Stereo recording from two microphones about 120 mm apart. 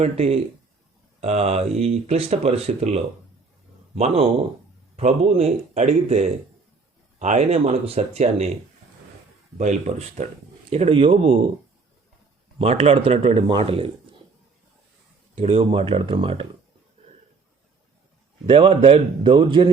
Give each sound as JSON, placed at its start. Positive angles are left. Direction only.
{"t": 0.0, "sound": "speech", "side_deg": -60}
{"t": 9.6, "sound": "speech", "side_deg": -70}
{"t": 10.7, "sound": "speech", "side_deg": -60}
{"t": 12.5, "sound": "speech", "side_deg": -60}
{"t": 15.4, "sound": "speech", "side_deg": -55}
{"t": 18.4, "sound": "speech", "side_deg": -50}